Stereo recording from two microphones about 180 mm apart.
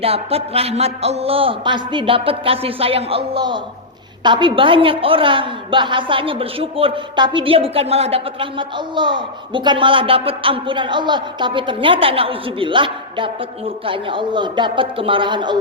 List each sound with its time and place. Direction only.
0.0 s a man's voice: 35° right (ahead or behind)